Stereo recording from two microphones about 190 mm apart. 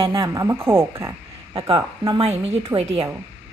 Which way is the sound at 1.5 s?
25° right (ahead or behind).